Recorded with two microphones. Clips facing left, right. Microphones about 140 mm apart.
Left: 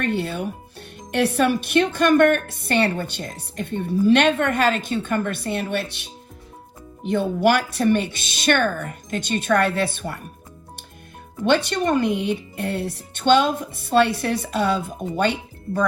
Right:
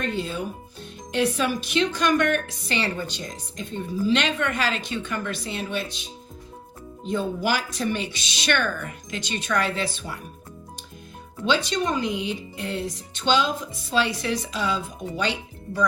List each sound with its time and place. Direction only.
0.0 s speech: 65° left (ahead or behind)
11.4 s speech: 60° left (ahead or behind)